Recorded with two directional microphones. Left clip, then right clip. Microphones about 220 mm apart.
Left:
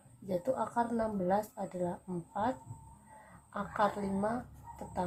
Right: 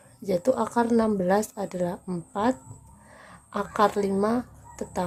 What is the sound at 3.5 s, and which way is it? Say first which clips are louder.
A woman's voice: right 9 dB; 45° right (ahead or behind).